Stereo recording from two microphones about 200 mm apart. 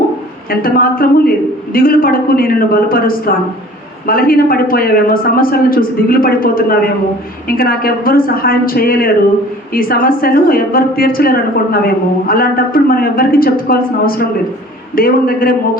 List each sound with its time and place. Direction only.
0.6 s a woman's voice: 45° left (ahead or behind)